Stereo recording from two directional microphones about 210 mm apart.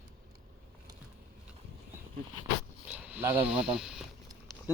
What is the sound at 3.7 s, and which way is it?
Speech, centre (ahead or behind).